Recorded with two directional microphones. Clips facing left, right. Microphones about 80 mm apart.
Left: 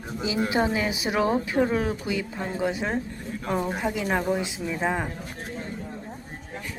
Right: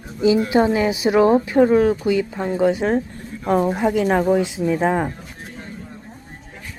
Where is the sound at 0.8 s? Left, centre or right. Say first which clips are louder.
Right 8 dB; right.